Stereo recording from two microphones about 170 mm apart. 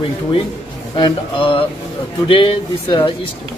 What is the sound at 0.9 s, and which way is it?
Speech, 30° left (ahead or behind).